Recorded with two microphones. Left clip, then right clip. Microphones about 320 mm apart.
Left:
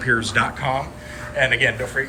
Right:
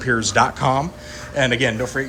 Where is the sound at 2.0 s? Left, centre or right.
Right.